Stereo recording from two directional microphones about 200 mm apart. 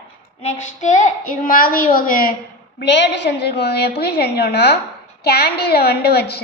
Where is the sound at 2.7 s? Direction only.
60° left (ahead or behind).